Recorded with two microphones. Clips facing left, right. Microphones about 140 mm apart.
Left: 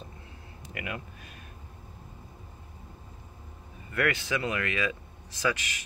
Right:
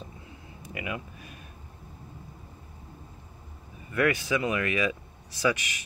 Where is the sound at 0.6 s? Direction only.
15° right (ahead or behind).